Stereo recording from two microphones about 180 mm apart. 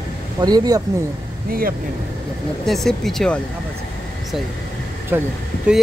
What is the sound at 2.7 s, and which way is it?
Speech, centre (ahead or behind).